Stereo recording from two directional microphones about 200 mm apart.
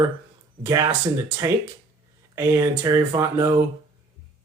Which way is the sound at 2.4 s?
15° right (ahead or behind).